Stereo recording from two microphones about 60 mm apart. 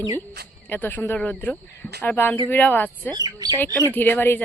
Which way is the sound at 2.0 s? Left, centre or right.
Left.